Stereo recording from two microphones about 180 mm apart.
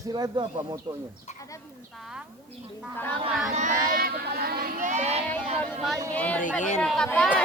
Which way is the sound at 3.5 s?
45° right (ahead or behind).